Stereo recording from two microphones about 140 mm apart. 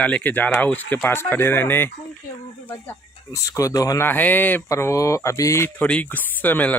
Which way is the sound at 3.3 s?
25° left (ahead or behind).